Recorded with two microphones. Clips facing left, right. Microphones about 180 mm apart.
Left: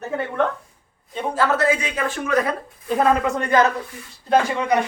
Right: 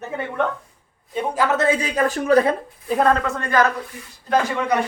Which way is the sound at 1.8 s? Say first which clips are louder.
Right 4 dB; 40° right (ahead or behind).